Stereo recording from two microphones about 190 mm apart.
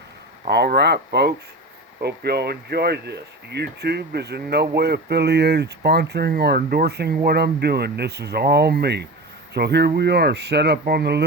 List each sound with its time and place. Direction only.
0.4 s speech: 55° right (ahead or behind)